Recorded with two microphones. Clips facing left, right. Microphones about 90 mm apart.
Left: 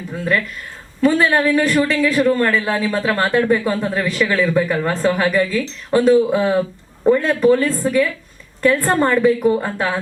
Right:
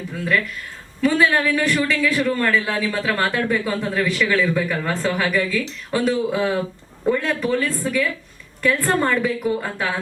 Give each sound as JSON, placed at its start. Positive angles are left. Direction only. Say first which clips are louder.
{"t": 0.3, "sound": "a man's voice", "louder": "left 1 dB", "side_deg": 35}